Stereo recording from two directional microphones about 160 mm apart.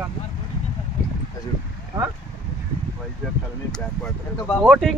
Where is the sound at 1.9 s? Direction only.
25° right (ahead or behind).